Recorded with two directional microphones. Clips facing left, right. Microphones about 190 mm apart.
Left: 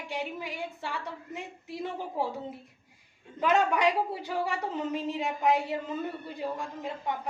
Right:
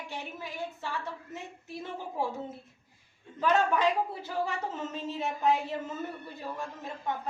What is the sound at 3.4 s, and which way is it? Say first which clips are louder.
A woman's voice: left 1 dB; 15° left (ahead or behind).